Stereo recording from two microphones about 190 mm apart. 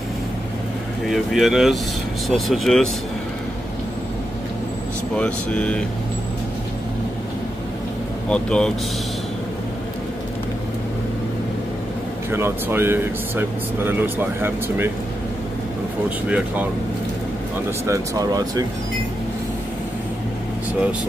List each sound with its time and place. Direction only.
1.0 s speech: centre (ahead or behind)
5.1 s speech: 5° left (ahead or behind)
8.3 s speech: 5° left (ahead or behind)
12.3 s speech: 15° right (ahead or behind)
16.3 s speech: 5° right (ahead or behind)
17.8 s speech: 15° right (ahead or behind)